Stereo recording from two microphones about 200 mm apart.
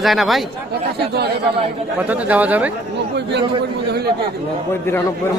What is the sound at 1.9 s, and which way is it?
Speech, 10° right (ahead or behind).